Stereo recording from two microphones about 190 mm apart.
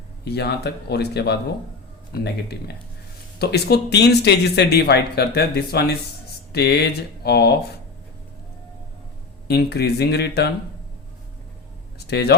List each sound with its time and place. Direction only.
0.3 s speech: 60° left (ahead or behind)
9.5 s speech: 60° left (ahead or behind)
11.9 s a sound: 60° left (ahead or behind)